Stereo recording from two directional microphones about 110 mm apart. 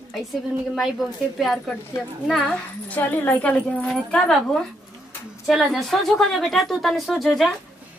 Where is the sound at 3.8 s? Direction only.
Centre (ahead or behind).